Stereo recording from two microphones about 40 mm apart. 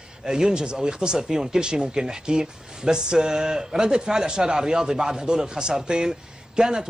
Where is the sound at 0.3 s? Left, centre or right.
Centre.